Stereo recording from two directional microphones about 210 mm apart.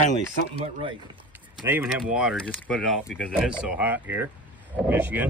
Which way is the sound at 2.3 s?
5° left (ahead or behind).